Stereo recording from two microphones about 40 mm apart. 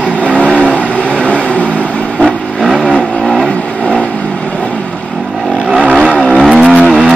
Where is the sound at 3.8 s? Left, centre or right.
Left.